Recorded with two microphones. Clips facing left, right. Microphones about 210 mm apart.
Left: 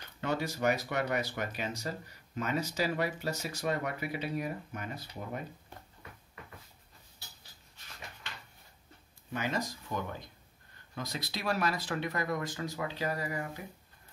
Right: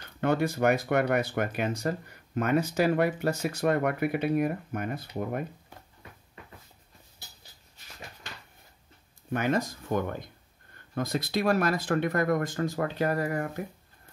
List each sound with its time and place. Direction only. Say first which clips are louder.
0.2 s speech: right 7 dB; 55° right (ahead or behind)
9.3 s speech: right 7 dB; 55° right (ahead or behind)